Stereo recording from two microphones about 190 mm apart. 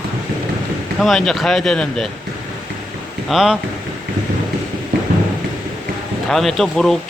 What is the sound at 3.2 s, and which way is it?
Speech, centre (ahead or behind).